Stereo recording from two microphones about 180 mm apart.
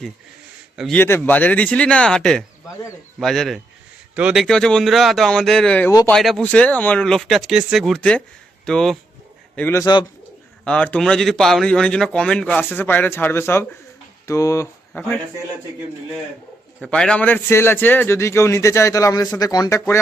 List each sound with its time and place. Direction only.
0.9 s a man's voice: 10° left (ahead or behind)
9.8 s speech: 25° left (ahead or behind)
10.6 s a man's voice: 5° left (ahead or behind)
16.8 s a man's voice: 5° left (ahead or behind); by 19.8 s 20° left (ahead or behind)